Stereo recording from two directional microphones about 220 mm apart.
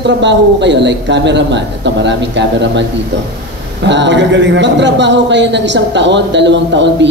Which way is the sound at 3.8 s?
55° right (ahead or behind).